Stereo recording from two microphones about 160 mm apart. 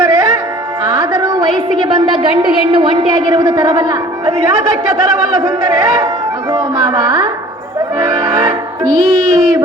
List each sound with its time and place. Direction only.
0.0 s music: 25° right (ahead or behind)
0.9 s a sound: 30° right (ahead or behind)
2.7 s a man's voice: 30° right (ahead or behind)
7.9 s music: 25° right (ahead or behind)